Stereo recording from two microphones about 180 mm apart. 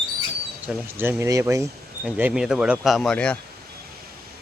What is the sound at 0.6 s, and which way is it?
Speech, 10° right (ahead or behind).